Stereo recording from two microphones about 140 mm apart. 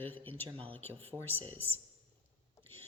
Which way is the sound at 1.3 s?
40° right (ahead or behind).